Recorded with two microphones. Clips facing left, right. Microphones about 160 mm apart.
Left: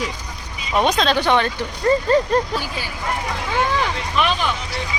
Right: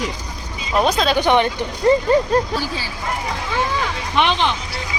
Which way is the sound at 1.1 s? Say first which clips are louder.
Right 2 dB; 15° right (ahead or behind).